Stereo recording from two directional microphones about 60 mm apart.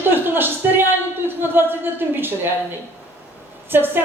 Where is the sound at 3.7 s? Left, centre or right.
Right.